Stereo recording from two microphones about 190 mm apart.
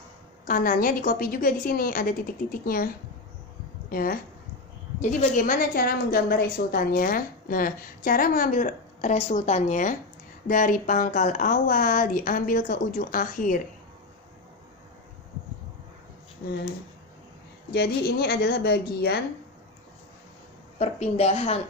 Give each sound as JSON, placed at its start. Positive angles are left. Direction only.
{"t": 0.4, "sound": "a woman's voice", "side_deg": 50}
{"t": 3.9, "sound": "a woman's voice", "side_deg": 50}
{"t": 17.7, "sound": "a woman's voice", "side_deg": 55}
{"t": 20.7, "sound": "a woman's voice", "side_deg": 35}